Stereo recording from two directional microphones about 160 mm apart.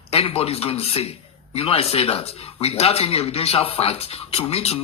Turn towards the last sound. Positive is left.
turn(degrees=40)  # may be behind; listen again after turning